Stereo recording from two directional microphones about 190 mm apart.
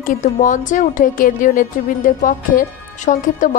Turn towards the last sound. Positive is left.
turn(degrees=45)  # may be behind; listen again after turning